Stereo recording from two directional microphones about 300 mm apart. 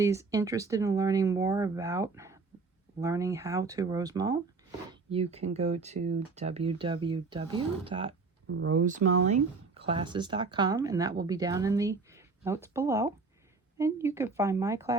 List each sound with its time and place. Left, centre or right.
0.0 s speech: centre
8.4 s speech: right
8.7 s speech: right; by 14.9 s centre